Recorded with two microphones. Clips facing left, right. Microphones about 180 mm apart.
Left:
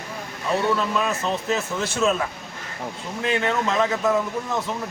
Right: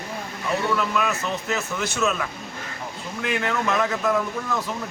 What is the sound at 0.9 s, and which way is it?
Speech, 30° left (ahead or behind).